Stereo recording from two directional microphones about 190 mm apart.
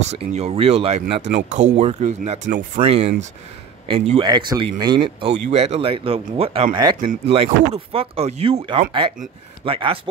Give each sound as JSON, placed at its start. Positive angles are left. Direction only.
{"t": 0.1, "sound": "speech", "side_deg": -35}
{"t": 2.8, "sound": "speech", "side_deg": -30}